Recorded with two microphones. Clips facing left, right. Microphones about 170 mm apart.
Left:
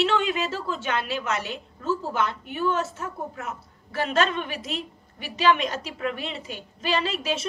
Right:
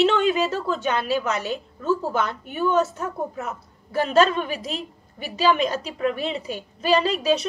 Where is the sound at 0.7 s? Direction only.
40° right (ahead or behind).